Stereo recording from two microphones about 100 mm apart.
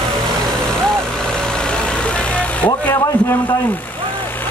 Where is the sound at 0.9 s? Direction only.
5° left (ahead or behind).